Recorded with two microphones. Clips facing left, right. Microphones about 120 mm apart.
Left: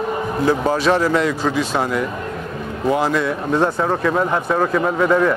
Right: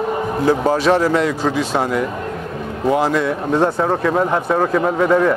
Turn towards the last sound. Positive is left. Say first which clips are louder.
# right 1 dB
turn(degrees=-35)  # may be behind; listen again after turning